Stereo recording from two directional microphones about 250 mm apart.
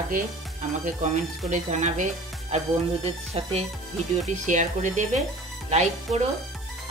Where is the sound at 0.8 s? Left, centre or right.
Right.